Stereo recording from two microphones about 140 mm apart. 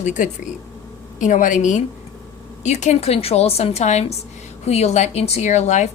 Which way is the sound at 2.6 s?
50° left (ahead or behind).